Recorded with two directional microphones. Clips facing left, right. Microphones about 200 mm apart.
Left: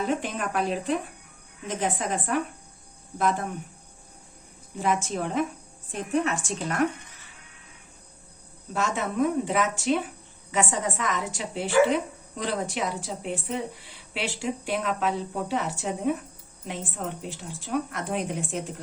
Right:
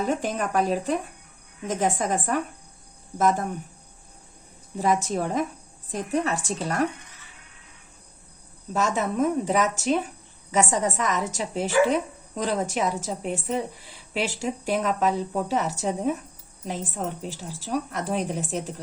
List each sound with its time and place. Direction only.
0.0 s a woman's voice: 45° right (ahead or behind)
4.8 s a woman's voice: 40° right (ahead or behind)
8.7 s a woman's voice: 40° right (ahead or behind)